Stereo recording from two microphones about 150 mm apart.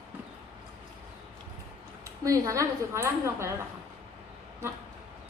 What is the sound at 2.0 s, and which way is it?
A woman's voice, 20° right (ahead or behind).